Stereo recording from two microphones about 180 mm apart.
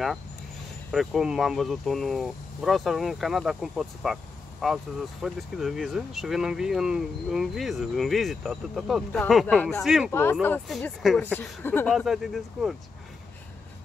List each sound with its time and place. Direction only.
0.9 s speech: centre (ahead or behind)
10.4 s speech: 10° left (ahead or behind)
11.9 s speech: centre (ahead or behind)